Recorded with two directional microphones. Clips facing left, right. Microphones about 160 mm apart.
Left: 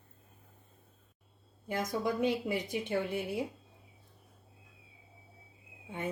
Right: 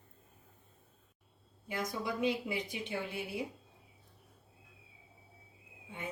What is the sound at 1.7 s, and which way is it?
A woman's voice, 50° left (ahead or behind).